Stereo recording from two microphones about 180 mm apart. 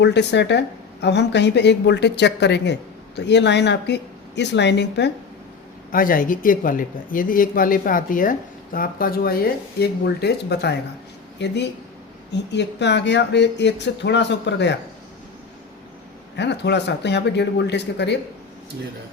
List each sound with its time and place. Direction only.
0.0 s speech: 70° left (ahead or behind)
5.9 s speech: 50° left (ahead or behind); by 14.8 s 75° left (ahead or behind)
16.4 s speech: 70° left (ahead or behind)